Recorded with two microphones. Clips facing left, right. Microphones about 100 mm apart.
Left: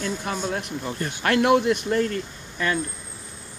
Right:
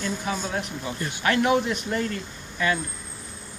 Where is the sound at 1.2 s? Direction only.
65° left (ahead or behind).